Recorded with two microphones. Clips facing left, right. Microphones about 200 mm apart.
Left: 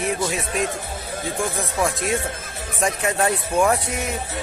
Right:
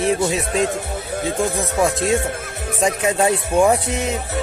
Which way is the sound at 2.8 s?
15° right (ahead or behind).